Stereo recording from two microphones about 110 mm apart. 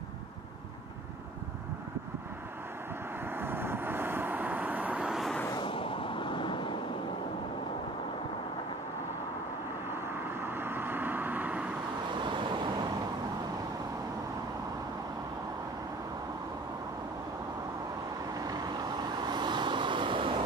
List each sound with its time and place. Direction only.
3.3 s vehicle: 20° right (ahead or behind); by 5.4 s centre (ahead or behind)
5.6 s vehicle: 50° left (ahead or behind)
10.4 s vehicle: 20° right (ahead or behind)
12.3 s vehicle: 45° right (ahead or behind)
18.4 s vehicle: 35° right (ahead or behind)